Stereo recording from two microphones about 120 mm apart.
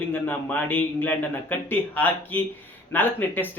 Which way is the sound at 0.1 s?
15° left (ahead or behind).